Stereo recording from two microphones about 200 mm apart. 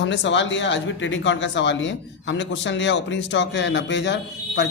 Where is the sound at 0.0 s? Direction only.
65° left (ahead or behind).